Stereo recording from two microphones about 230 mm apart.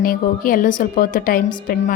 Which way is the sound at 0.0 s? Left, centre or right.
Left.